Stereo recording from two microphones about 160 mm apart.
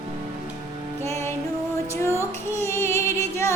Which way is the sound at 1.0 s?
20° left (ahead or behind).